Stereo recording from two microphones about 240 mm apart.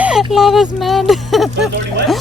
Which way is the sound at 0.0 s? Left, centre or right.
Centre.